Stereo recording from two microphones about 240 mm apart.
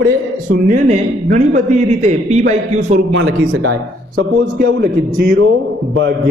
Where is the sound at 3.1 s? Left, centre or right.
Right.